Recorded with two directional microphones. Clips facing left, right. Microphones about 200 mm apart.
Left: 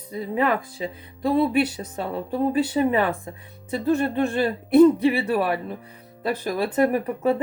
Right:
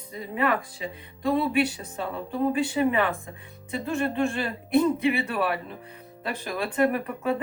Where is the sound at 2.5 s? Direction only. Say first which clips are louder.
Left 4 dB; 35° left (ahead or behind).